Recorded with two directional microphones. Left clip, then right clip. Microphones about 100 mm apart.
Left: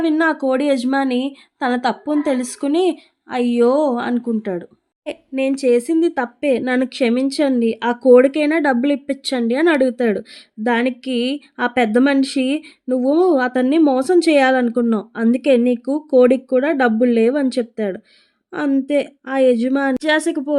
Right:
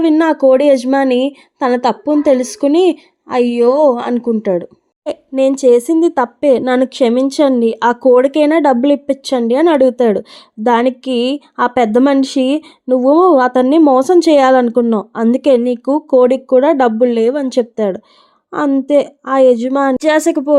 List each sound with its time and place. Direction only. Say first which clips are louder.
0.0 s a woman's voice: right 7 dB; 30° right (ahead or behind)
15.1 s speech: right 4 dB; 30° right (ahead or behind)